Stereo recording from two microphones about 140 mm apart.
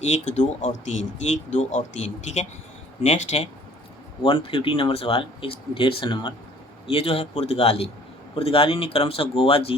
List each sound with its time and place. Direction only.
0.1 s speech: 60° left (ahead or behind)
3.0 s speech: 55° left (ahead or behind)
4.2 s speech: 40° left (ahead or behind)